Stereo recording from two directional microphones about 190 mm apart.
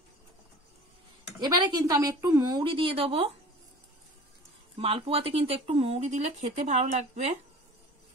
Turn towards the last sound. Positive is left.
turn(degrees=-35)  # may be behind; listen again after turning